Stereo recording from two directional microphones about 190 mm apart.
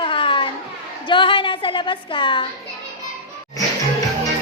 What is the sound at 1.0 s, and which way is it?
A woman's voice, 25° left (ahead or behind).